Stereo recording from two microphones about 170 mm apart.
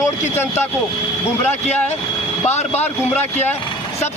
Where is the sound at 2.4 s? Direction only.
40° left (ahead or behind).